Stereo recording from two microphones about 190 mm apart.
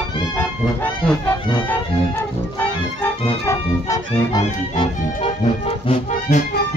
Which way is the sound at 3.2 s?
15° left (ahead or behind).